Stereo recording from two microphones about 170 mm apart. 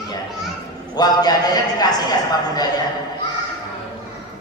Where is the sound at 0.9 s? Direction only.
25° left (ahead or behind).